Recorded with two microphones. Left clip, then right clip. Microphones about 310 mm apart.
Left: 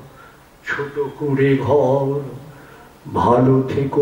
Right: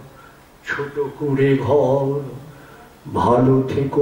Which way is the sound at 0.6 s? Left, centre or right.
Centre.